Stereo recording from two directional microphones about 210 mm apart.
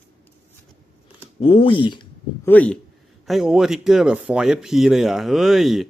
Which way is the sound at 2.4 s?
5° left (ahead or behind).